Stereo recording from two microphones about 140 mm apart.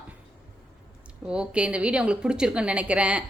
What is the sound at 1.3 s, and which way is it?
Speech, 5° right (ahead or behind).